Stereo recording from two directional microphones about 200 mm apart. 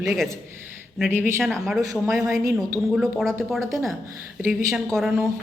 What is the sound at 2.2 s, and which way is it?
Speech, 15° right (ahead or behind).